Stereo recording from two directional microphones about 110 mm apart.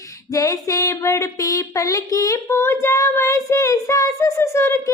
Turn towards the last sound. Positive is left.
turn(degrees=25)  # may be behind; listen again after turning